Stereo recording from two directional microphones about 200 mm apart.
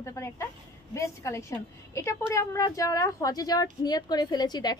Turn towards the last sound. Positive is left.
turn(degrees=20)  # may be behind; listen again after turning